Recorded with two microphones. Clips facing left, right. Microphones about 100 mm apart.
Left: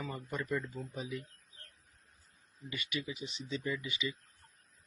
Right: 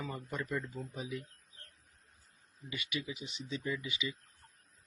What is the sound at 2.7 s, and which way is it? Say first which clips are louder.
Speech: even; 15° right (ahead or behind).